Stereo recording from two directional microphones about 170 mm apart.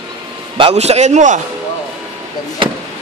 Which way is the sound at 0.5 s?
35° right (ahead or behind).